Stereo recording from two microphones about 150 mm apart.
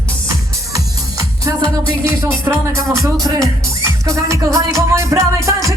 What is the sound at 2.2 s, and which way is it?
Speech, 20° right (ahead or behind).